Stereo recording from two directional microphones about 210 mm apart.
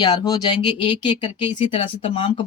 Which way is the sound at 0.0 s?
20° left (ahead or behind).